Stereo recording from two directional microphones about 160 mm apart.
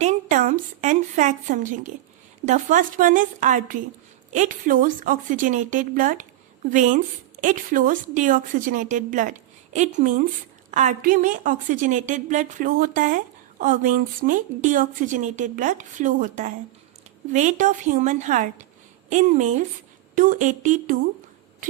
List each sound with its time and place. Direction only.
0.0 s a woman's voice: 50° right (ahead or behind)